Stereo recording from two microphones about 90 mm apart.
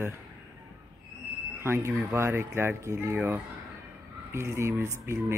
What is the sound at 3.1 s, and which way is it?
Speech, 20° right (ahead or behind).